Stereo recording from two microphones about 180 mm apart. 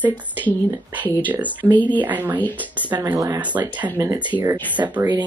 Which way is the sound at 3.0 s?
20° right (ahead or behind).